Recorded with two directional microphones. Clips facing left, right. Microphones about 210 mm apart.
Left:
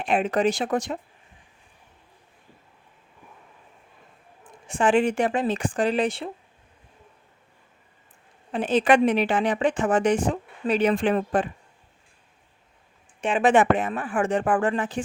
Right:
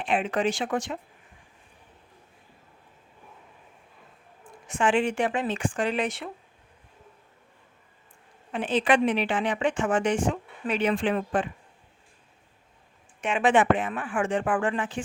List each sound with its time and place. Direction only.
0.0 s a woman's voice: 40° left (ahead or behind)
4.6 s a woman's voice: 35° left (ahead or behind)
8.5 s a woman's voice: 40° left (ahead or behind)
13.2 s a woman's voice: 40° left (ahead or behind)